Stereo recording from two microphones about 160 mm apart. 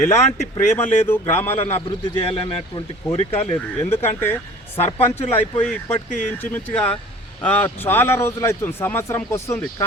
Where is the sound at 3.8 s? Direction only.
15° left (ahead or behind).